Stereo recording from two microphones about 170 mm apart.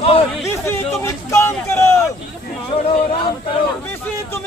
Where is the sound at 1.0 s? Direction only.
15° left (ahead or behind).